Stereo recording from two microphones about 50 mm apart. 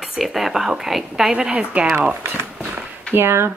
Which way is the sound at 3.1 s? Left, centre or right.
Right.